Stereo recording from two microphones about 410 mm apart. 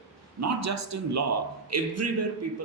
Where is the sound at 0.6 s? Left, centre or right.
Right.